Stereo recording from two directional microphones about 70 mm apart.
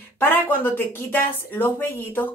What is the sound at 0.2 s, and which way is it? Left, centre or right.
Speech, left.